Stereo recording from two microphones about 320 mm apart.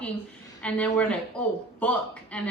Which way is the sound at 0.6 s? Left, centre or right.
Centre.